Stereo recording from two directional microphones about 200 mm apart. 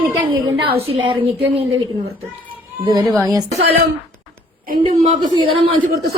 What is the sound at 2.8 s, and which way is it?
Speech, 20° right (ahead or behind).